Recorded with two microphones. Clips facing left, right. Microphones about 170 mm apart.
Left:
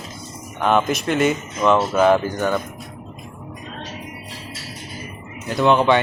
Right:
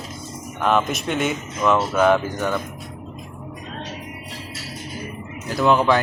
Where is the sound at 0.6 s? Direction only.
Centre (ahead or behind).